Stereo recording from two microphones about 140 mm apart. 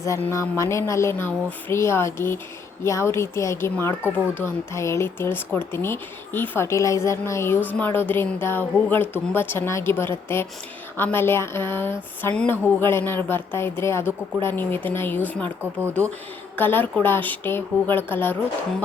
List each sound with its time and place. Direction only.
0.0 s speech: 20° left (ahead or behind)
16.6 s speech: 15° left (ahead or behind)